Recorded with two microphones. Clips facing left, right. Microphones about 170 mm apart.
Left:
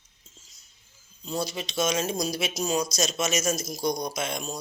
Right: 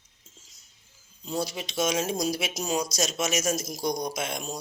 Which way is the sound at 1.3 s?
15° right (ahead or behind).